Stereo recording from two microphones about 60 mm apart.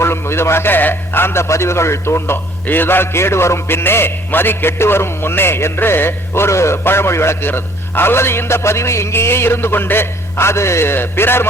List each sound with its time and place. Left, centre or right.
0.0 s a man's voice: left